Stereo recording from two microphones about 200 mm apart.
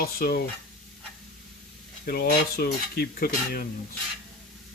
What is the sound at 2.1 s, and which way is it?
Speech, 50° left (ahead or behind).